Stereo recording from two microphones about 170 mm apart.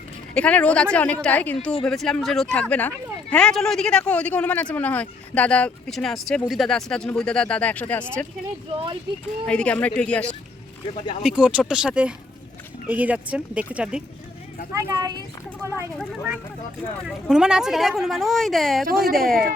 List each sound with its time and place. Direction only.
0.3 s speech: 5° left (ahead or behind)
9.5 s speech: 5° left (ahead or behind)
11.2 s speech: 5° right (ahead or behind)
14.7 s speech: 15° right (ahead or behind)
16.0 s speech: 5° right (ahead or behind)
18.9 s speech: 65° right (ahead or behind)
19.1 s speech: centre (ahead or behind)